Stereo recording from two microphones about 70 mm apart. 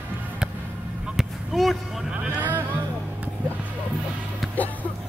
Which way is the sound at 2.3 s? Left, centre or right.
Right.